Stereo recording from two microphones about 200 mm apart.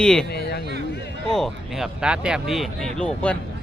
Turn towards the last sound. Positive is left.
turn(degrees=5)  # may be behind; listen again after turning